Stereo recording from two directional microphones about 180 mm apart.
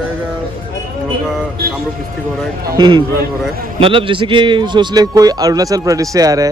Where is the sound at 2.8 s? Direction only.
25° right (ahead or behind).